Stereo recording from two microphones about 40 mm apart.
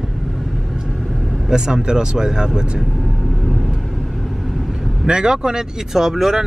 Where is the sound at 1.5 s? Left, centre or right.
Centre.